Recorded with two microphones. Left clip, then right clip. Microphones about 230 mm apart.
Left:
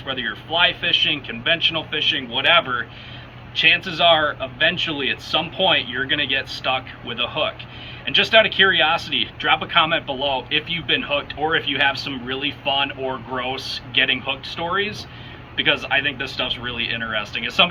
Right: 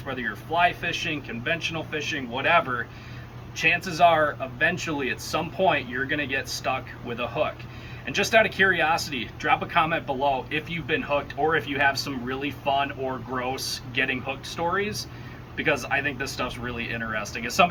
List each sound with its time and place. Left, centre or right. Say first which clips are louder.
0.0 s speech: left 5 dB; centre